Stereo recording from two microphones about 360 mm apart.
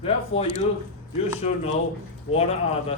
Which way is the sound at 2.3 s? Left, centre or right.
Centre.